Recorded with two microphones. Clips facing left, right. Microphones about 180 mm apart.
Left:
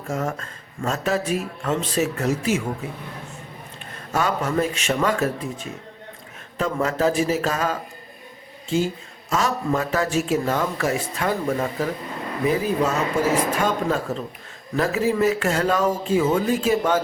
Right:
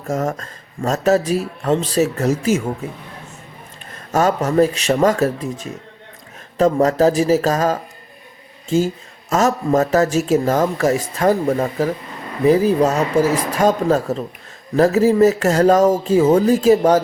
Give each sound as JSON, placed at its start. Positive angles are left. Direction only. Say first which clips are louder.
{"t": 0.1, "sound": "a man's voice", "louder": "right 5 dB", "side_deg": -40}
{"t": 4.1, "sound": "a man's voice", "louder": "right 6 dB", "side_deg": -45}
{"t": 9.3, "sound": "a man's voice", "louder": "right 6 dB", "side_deg": -45}